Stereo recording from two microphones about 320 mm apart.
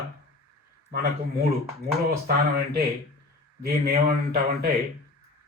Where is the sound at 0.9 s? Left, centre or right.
Right.